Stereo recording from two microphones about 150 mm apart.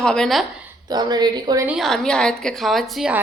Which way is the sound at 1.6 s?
Centre (ahead or behind).